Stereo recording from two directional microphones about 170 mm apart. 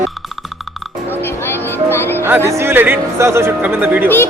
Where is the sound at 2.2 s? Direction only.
15° right (ahead or behind).